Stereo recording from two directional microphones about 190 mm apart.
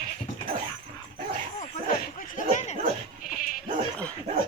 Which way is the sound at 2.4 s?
40° left (ahead or behind).